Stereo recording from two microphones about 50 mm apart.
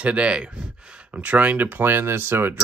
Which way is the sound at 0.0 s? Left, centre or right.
Right.